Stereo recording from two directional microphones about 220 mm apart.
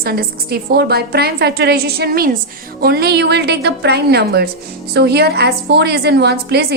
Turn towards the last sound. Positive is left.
turn(degrees=-50)  # may be behind; listen again after turning